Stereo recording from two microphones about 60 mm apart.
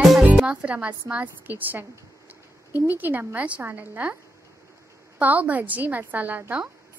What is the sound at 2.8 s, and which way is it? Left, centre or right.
A woman's voice, right.